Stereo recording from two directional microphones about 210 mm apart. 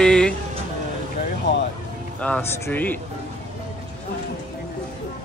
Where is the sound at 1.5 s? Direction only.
55° left (ahead or behind).